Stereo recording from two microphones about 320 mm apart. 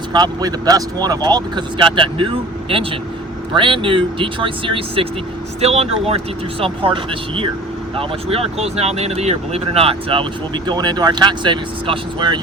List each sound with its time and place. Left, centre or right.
0.1 s speech: centre
3.5 s speech: centre